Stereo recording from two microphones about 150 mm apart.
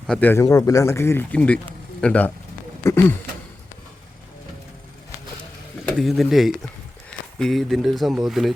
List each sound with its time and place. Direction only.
0.1 s speech: 10° left (ahead or behind)
6.0 s speech: centre (ahead or behind)